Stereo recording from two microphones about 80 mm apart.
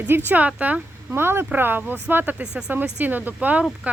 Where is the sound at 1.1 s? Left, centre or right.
Right.